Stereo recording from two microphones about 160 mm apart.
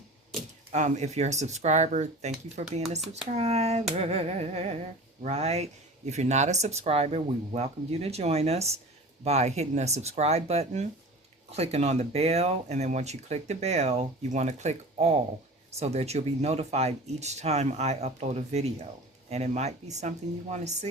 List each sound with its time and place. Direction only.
0.7 s speech: 45° right (ahead or behind)